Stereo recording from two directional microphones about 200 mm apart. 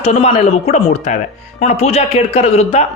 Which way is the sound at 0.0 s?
30° left (ahead or behind).